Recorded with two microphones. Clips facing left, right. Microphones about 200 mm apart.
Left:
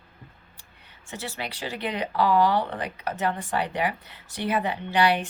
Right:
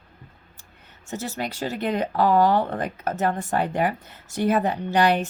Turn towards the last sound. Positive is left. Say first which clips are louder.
# right 3 dB
turn(degrees=-45)  # may be behind; listen again after turning